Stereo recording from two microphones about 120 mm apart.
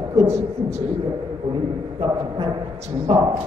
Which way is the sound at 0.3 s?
65° right (ahead or behind).